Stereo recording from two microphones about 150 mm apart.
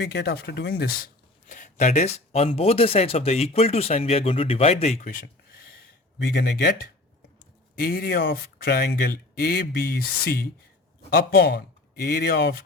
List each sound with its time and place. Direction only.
0.1 s speech: 90° left
1.5 s speech: 55° left (ahead or behind); by 5.8 s 75° left (ahead or behind)
6.2 s speech: 90° left